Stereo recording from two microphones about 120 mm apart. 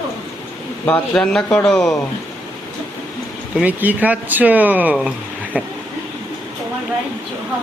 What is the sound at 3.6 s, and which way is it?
Speech, 15° right (ahead or behind).